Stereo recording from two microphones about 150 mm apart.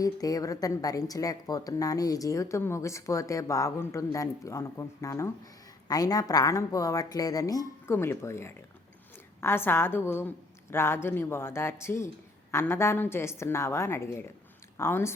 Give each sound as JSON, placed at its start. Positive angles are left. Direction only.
{"t": 0.0, "sound": "a woman's voice", "side_deg": 25}